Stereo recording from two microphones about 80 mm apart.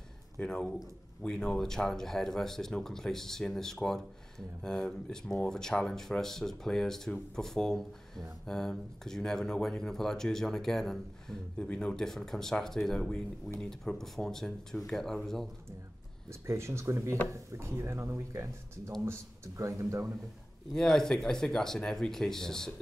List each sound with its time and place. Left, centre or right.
0.4 s speech: centre
16.3 s speech: right
20.7 s speech: centre